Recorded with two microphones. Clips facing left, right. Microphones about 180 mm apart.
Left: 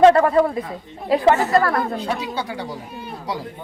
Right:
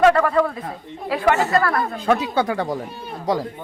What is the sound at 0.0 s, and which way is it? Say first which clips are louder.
Speech: left 3 dB; 25° left (ahead or behind).